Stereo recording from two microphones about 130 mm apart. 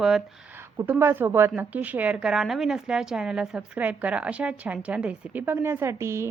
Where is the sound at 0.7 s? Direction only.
15° right (ahead or behind).